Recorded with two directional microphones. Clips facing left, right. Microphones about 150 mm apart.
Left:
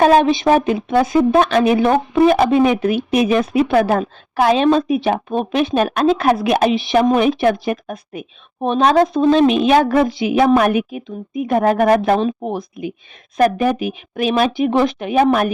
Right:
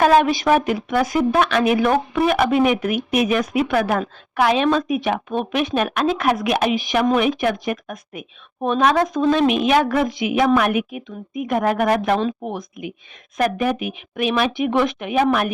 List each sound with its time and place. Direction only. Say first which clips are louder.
0.0 s speech: left 3 dB; 30° left (ahead or behind)